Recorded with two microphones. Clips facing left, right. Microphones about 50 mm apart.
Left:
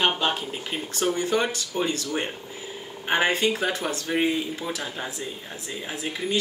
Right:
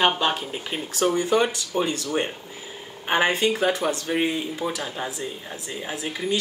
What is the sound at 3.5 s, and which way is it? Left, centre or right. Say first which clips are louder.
Speech: right 4 dB; centre.